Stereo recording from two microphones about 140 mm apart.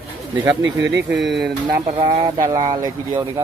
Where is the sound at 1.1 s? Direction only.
Centre (ahead or behind).